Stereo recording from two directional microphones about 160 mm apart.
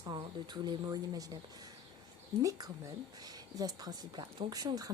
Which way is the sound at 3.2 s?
25° right (ahead or behind).